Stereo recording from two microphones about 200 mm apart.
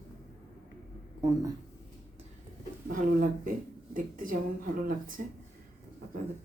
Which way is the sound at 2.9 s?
40° right (ahead or behind).